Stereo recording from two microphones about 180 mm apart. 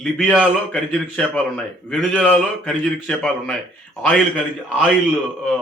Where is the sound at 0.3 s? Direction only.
5° left (ahead or behind).